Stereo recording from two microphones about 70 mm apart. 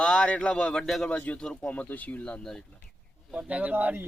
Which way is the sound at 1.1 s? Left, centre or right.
Centre.